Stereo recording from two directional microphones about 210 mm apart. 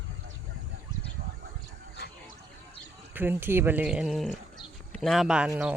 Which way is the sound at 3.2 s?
10° right (ahead or behind).